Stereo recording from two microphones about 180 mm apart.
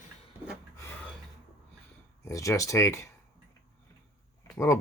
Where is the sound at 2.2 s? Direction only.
15° left (ahead or behind).